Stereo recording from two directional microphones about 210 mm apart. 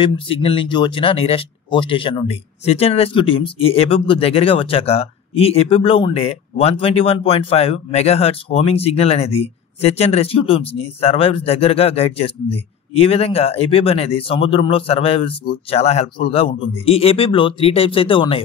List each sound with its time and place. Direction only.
0.0 s speech: 25° left (ahead or behind)